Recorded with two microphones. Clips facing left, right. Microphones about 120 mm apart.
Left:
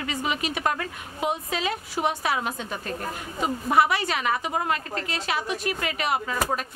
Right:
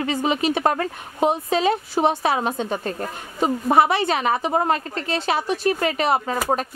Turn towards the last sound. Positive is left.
turn(degrees=-35)  # may be behind; listen again after turning